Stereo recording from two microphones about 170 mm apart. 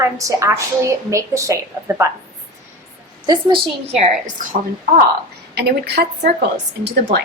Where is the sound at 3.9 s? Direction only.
40° right (ahead or behind).